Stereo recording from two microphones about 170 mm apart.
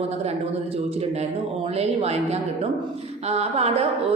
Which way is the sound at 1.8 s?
40° right (ahead or behind).